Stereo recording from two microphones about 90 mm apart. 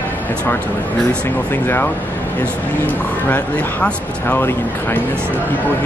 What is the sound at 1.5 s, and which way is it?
Speech, 20° left (ahead or behind).